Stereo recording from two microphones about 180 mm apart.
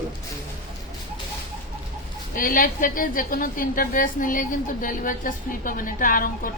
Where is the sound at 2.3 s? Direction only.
50° left (ahead or behind).